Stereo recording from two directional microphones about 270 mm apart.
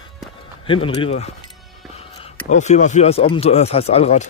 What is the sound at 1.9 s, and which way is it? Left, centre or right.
Music, left.